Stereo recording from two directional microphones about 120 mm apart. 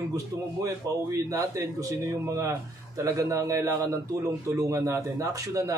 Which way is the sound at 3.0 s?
25° right (ahead or behind).